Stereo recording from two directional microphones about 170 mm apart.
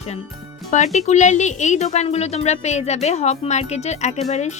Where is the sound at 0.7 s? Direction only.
40° left (ahead or behind).